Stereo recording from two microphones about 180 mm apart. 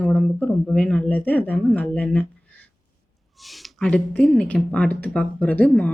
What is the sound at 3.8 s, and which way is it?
Speech, 5° left (ahead or behind).